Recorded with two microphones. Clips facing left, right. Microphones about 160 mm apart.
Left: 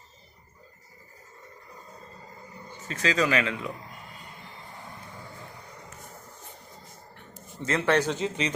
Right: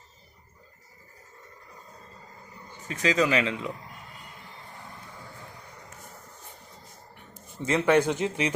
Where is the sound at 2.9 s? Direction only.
15° right (ahead or behind).